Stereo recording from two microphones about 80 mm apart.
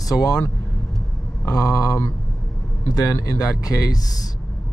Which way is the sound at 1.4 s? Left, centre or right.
Left.